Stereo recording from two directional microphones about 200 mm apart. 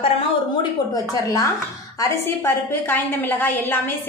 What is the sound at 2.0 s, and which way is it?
A woman's voice, 15° left (ahead or behind).